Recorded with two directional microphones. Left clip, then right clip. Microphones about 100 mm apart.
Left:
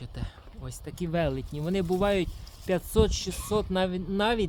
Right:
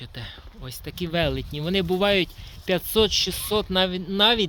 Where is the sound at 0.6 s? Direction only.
45° right (ahead or behind); by 2.8 s 70° right (ahead or behind).